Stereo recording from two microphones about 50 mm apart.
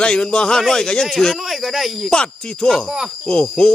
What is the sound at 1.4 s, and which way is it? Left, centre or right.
Speech, centre.